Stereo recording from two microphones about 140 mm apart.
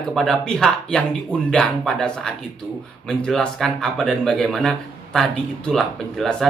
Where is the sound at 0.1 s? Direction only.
Centre (ahead or behind).